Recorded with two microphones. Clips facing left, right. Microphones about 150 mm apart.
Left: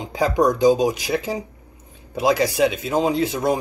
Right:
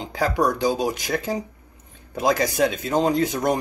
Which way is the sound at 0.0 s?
20° left (ahead or behind).